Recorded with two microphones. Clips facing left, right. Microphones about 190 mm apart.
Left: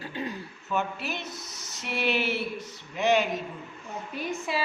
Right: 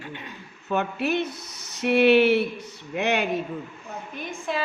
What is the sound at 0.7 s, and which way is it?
A woman's voice, 60° right (ahead or behind).